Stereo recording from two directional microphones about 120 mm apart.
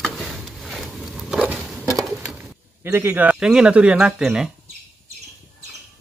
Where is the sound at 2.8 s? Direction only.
20° right (ahead or behind).